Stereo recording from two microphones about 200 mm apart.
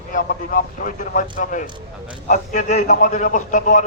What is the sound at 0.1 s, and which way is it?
A man's voice, 40° left (ahead or behind).